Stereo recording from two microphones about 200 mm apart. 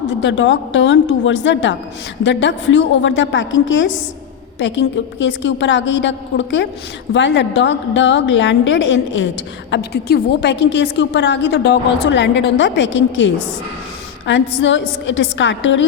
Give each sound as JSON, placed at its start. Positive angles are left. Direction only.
{"t": 0.1, "sound": "a woman's voice", "side_deg": 65}
{"t": 9.7, "sound": "a woman's voice", "side_deg": 55}